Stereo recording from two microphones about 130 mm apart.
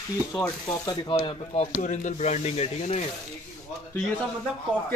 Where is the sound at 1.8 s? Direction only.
70° left (ahead or behind).